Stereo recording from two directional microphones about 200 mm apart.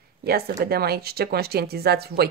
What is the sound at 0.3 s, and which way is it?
Speech, 50° right (ahead or behind).